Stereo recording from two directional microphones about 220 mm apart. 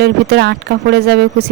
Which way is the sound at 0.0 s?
50° right (ahead or behind).